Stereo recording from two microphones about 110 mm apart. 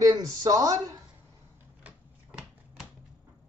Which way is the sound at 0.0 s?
35° right (ahead or behind).